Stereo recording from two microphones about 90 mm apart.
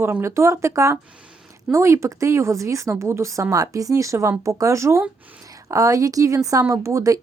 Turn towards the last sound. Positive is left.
turn(degrees=-35)  # may be behind; listen again after turning